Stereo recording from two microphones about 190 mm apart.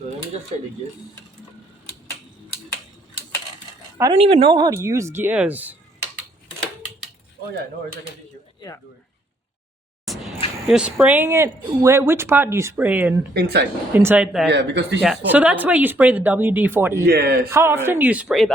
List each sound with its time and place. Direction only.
4.1 s speech: 30° right (ahead or behind); by 5.7 s 10° right (ahead or behind)
10.7 s speech: 5° right (ahead or behind)
13.3 s speech: 60° right (ahead or behind)
13.9 s speech: 10° right (ahead or behind)
14.5 s speech: 65° right (ahead or behind)
15.0 s speech: 5° right (ahead or behind)
17.1 s speech: 55° right (ahead or behind)
17.5 s speech: 15° right (ahead or behind)